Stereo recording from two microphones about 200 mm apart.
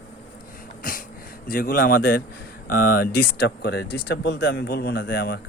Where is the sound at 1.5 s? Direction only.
45° left (ahead or behind).